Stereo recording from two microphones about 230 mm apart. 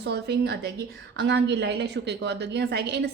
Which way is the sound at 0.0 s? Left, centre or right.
Right.